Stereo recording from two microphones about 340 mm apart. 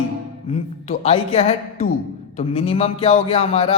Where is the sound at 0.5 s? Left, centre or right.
Centre.